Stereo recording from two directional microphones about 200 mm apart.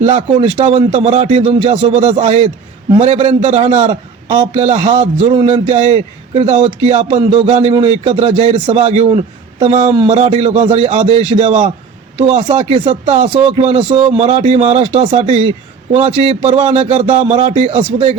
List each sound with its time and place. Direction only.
0.0 s a man's voice: 30° right (ahead or behind)